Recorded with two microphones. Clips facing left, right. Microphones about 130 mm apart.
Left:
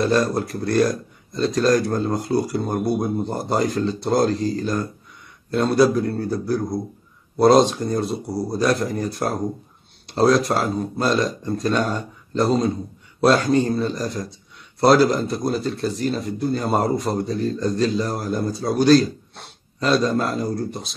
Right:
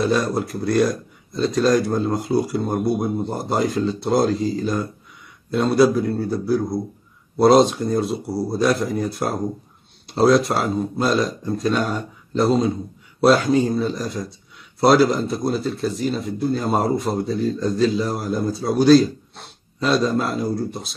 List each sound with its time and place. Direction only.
0.0 s speech: centre (ahead or behind)